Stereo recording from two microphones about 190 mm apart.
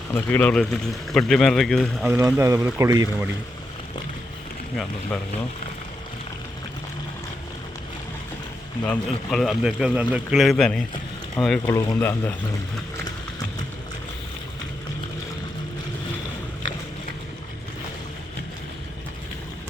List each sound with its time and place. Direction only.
0.1 s a man's voice: 10° left (ahead or behind)
2.0 s speech: 10° right (ahead or behind)
8.9 s a man's voice: centre (ahead or behind)
11.7 s speech: 15° left (ahead or behind)